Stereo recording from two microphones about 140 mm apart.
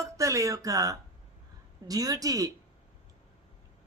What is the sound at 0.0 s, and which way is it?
Speech, 20° right (ahead or behind).